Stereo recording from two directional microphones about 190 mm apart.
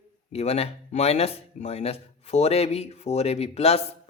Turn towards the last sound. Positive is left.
turn(degrees=35)  # may be behind; listen again after turning